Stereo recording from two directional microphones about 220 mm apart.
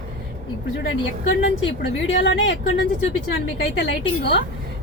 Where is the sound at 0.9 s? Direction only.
55° left (ahead or behind).